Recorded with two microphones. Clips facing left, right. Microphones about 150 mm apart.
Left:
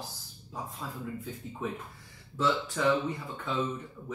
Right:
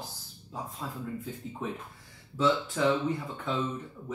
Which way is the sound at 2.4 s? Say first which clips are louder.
Right 2 dB; centre (ahead or behind).